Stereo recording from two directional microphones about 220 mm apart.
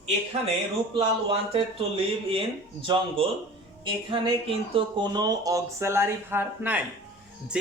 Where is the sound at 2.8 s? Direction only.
20° right (ahead or behind).